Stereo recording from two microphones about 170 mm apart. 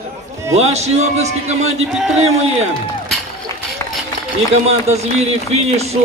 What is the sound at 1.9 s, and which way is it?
Speech, centre (ahead or behind).